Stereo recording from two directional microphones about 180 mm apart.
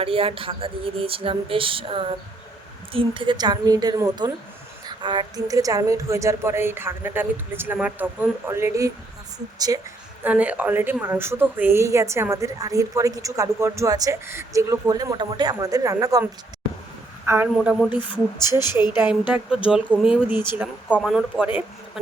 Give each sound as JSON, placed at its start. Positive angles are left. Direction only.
{"t": 0.0, "sound": "a woman's voice", "side_deg": -30}
{"t": 10.2, "sound": "a woman's voice", "side_deg": -10}
{"t": 18.0, "sound": "speech", "side_deg": 25}
{"t": 18.8, "sound": "a woman's voice", "side_deg": -10}